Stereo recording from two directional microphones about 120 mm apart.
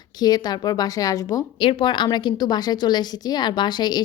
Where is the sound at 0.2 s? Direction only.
35° left (ahead or behind).